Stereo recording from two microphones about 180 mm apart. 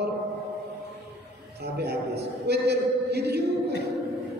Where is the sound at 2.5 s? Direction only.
65° right (ahead or behind).